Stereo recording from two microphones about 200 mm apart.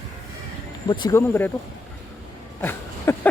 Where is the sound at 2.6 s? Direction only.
10° left (ahead or behind).